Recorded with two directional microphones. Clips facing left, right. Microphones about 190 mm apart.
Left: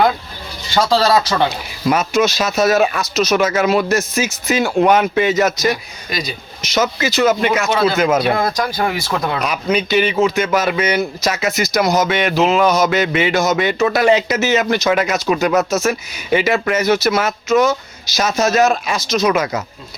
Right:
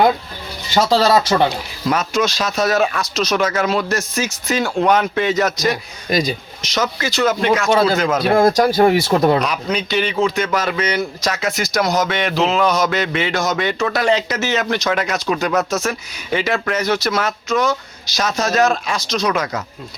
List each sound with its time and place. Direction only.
1.5 s a man's voice: 10° left (ahead or behind)
6.1 s speech: 45° right (ahead or behind)
6.6 s a man's voice: 5° left (ahead or behind)
8.2 s speech: 45° right (ahead or behind)
9.4 s a man's voice: 5° left (ahead or behind)